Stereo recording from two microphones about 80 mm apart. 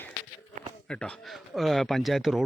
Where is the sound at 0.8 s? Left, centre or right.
Centre.